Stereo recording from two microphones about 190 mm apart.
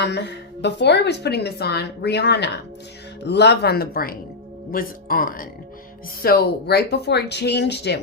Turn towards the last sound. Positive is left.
turn(degrees=60)  # may be behind; listen again after turning